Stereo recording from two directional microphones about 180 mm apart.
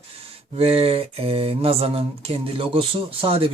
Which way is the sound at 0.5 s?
35° right (ahead or behind).